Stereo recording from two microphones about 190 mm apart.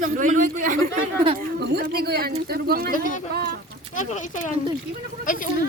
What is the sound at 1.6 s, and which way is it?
Speech, 55° right (ahead or behind).